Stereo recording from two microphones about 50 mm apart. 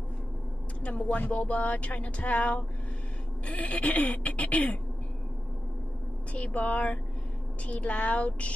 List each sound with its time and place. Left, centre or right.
0.8 s speech: left
6.3 s speech: left